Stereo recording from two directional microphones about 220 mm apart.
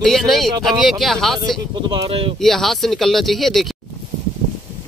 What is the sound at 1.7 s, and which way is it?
Speech, 25° right (ahead or behind).